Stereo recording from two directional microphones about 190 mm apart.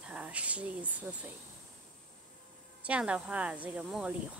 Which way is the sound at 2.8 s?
5° right (ahead or behind).